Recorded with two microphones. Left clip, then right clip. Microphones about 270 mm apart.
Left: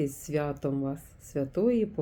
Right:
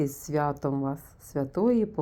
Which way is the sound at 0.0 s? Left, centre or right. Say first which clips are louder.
Right 3 dB; centre.